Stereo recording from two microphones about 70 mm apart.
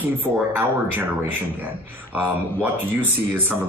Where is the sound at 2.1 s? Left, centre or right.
Right.